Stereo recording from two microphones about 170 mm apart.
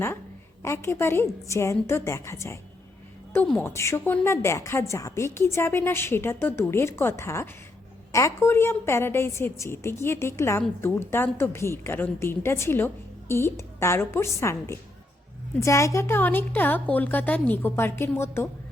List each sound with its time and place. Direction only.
0.6 s a woman's voice: 15° left (ahead or behind)
3.3 s a woman's voice: 5° left (ahead or behind)
3.6 s a woman's voice: 15° left (ahead or behind)
15.6 s a woman's voice: 15° left (ahead or behind)